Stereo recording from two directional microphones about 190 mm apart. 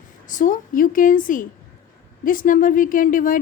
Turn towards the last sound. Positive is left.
turn(degrees=45)  # may be behind; listen again after turning